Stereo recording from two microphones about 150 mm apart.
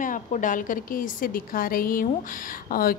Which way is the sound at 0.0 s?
60° left (ahead or behind).